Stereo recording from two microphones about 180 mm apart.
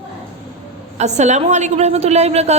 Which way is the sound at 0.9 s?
40° right (ahead or behind).